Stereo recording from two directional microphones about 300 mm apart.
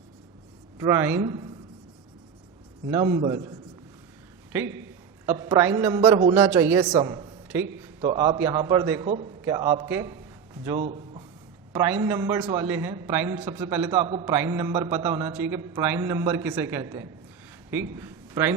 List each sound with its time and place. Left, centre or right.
0.8 s a man's voice: centre
2.8 s a man's voice: centre
4.5 s a man's voice: centre
8.0 s a man's voice: centre
17.9 s a sound: centre